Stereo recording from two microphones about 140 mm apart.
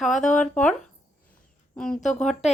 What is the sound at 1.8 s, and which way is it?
Speech, 5° left (ahead or behind).